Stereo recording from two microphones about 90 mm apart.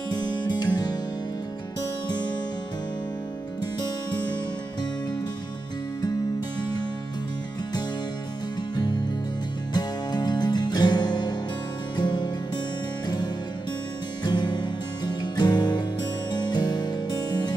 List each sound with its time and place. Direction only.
0.4 s music: 55° left (ahead or behind)
9.8 s music: 55° left (ahead or behind)
14.2 s music: 55° left (ahead or behind)